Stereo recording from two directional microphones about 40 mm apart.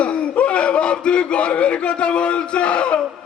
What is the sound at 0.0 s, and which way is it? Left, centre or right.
Speech, left.